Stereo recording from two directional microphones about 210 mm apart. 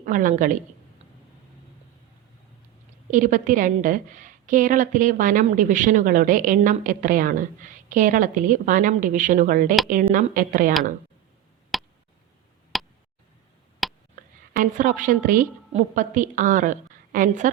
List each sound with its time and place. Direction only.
0.0 s a woman's voice: 40° right (ahead or behind)
3.1 s a woman's voice: 40° right (ahead or behind)
11.7 s a sound: centre (ahead or behind)
14.5 s a woman's voice: 40° right (ahead or behind)